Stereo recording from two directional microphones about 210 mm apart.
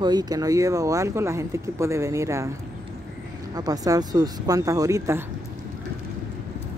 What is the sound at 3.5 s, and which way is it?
Speech, 15° right (ahead or behind).